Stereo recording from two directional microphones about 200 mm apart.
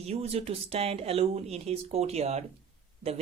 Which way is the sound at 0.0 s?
30° right (ahead or behind).